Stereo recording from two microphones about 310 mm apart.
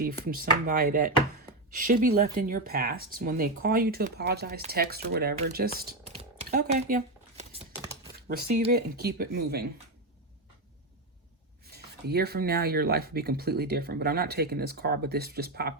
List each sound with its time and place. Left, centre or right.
0.0 s speech: right
6.1 s a sound: right
8.3 s speech: right
11.7 s speech: right